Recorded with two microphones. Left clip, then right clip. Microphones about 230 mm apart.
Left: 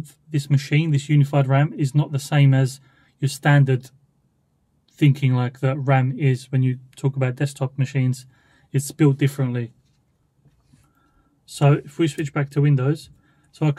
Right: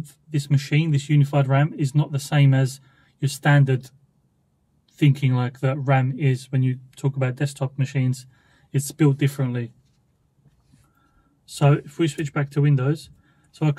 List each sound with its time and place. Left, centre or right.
0.0 s speech: left
4.9 s speech: left
11.5 s speech: left